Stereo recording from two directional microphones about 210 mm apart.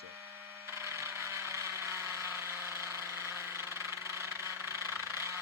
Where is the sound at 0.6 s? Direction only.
15° right (ahead or behind).